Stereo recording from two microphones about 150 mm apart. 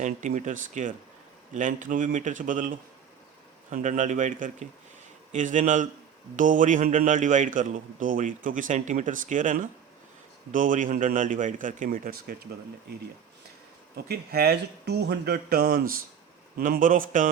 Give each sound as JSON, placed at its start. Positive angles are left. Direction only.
{"t": 0.0, "sound": "a man's voice", "side_deg": -55}
{"t": 13.9, "sound": "speech", "side_deg": -90}
{"t": 16.6, "sound": "a man's voice", "side_deg": -70}